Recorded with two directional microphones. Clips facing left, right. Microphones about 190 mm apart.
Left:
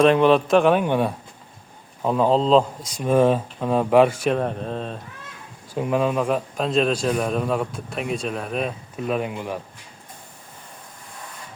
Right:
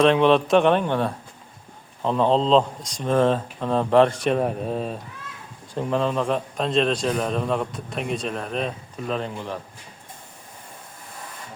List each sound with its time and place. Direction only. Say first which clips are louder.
0.0 s a man's voice: left 1 dB; 5° left (ahead or behind)
5.7 s a man's voice: left 2 dB; 10° left (ahead or behind)